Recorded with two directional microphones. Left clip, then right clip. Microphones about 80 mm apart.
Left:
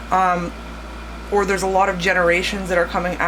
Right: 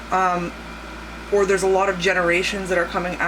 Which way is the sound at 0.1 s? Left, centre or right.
Left.